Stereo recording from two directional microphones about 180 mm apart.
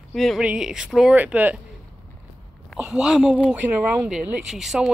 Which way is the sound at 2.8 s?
5° right (ahead or behind).